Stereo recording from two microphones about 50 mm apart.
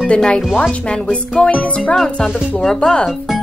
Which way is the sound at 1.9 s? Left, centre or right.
Centre.